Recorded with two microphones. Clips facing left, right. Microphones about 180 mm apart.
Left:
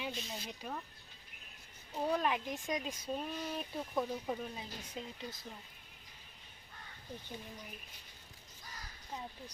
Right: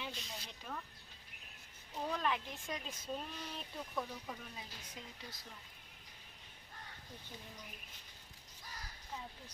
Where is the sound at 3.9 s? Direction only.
25° left (ahead or behind).